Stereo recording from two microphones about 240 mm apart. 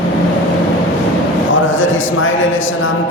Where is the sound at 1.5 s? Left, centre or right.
Left.